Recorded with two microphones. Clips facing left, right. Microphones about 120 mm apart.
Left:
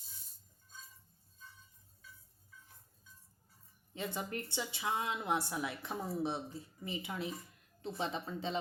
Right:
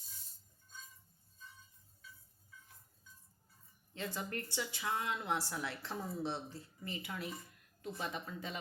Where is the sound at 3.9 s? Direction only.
20° left (ahead or behind).